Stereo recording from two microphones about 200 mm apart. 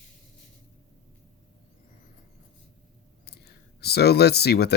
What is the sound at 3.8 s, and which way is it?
Speech, 55° left (ahead or behind).